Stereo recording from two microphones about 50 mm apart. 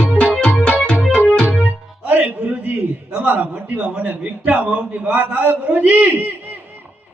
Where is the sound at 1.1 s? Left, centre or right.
Left.